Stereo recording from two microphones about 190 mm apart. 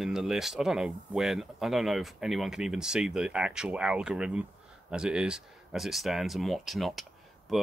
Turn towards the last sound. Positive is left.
turn(degrees=0)  # may be behind; listen again after turning